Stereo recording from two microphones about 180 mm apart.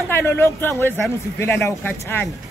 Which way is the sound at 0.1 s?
10° left (ahead or behind).